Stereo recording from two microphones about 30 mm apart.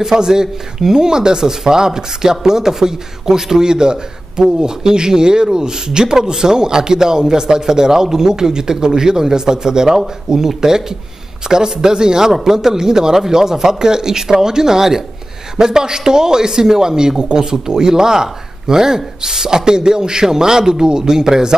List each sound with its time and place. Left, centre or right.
0.0 s speech: centre